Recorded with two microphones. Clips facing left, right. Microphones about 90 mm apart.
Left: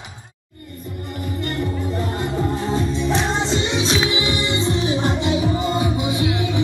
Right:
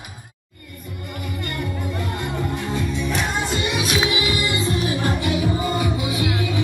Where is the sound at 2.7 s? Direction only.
30° left (ahead or behind).